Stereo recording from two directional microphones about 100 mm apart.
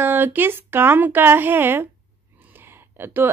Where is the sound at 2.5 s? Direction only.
20° right (ahead or behind).